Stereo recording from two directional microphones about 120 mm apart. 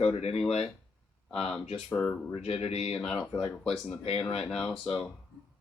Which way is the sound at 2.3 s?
55° left (ahead or behind).